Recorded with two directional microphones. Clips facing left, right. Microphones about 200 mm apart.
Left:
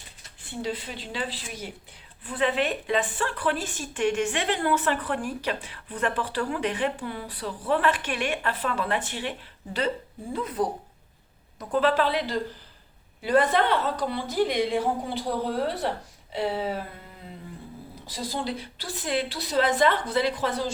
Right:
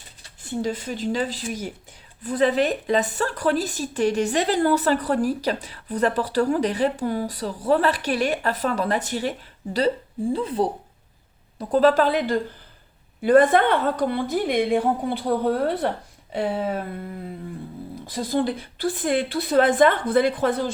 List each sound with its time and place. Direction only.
0.2 s speech: 45° right (ahead or behind)
10.3 s a woman's voice: 30° right (ahead or behind); by 16.8 s 50° right (ahead or behind)
18.0 s a woman's voice: 55° right (ahead or behind)